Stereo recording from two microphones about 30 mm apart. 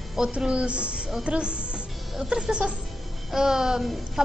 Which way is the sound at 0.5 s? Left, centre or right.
Right.